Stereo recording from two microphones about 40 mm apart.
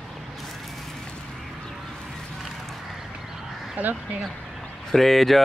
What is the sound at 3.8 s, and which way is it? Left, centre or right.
Speech, right.